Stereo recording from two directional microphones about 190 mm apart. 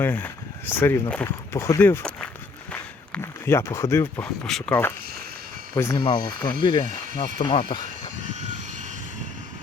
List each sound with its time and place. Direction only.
0.0 s speech: 10° left (ahead or behind)
6.0 s speech: 25° left (ahead or behind)